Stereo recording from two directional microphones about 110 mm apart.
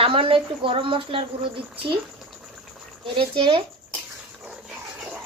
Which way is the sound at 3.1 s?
50° right (ahead or behind).